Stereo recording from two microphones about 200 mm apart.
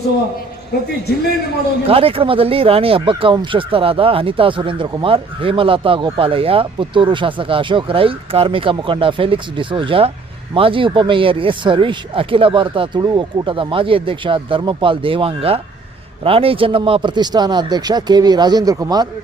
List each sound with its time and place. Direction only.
1.9 s speech: 30° right (ahead or behind)